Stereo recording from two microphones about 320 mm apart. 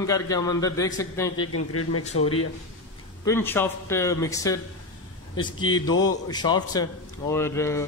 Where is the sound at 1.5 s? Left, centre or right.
Left.